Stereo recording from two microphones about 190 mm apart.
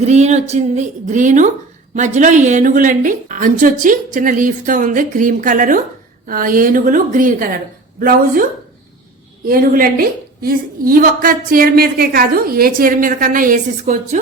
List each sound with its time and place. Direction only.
0.0 s a woman's voice: 35° right (ahead or behind)
9.5 s a woman's voice: 50° right (ahead or behind)